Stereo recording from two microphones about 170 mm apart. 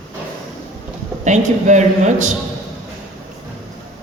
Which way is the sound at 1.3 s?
45° right (ahead or behind).